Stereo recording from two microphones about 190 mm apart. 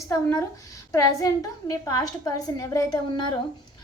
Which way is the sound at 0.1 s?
15° left (ahead or behind).